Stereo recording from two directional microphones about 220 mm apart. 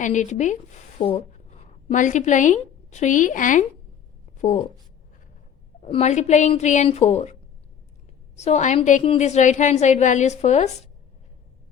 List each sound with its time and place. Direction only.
0.0 s a woman's voice: 35° left (ahead or behind)
5.8 s a woman's voice: 30° left (ahead or behind)
8.4 s a woman's voice: 30° left (ahead or behind)